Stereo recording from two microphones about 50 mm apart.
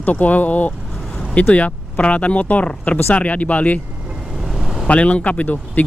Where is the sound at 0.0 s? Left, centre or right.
Left.